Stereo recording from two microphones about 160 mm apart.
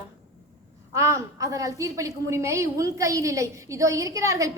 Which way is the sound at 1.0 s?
20° right (ahead or behind).